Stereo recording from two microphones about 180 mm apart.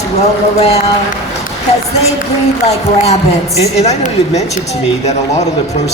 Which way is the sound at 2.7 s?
35° left (ahead or behind).